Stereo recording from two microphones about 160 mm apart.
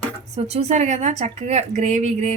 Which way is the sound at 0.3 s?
40° right (ahead or behind).